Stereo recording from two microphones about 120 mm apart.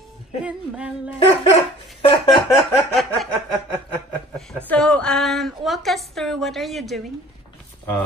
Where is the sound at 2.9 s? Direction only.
Centre (ahead or behind).